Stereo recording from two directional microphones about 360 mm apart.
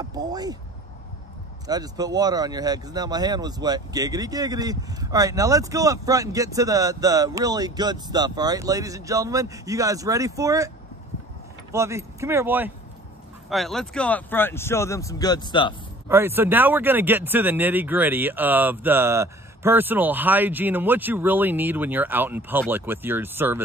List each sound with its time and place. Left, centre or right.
0.0 s speech: centre
1.7 s speech: centre
11.7 s speech: centre
16.1 s speech: centre